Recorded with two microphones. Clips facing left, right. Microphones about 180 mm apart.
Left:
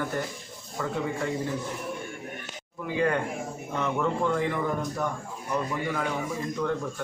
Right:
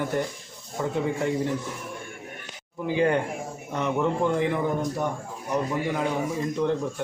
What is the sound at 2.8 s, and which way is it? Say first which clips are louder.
Speech: right 3 dB; 25° right (ahead or behind).